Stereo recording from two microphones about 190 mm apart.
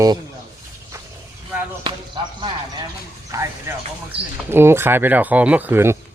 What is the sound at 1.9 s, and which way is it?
Basketball bounce, 25° right (ahead or behind).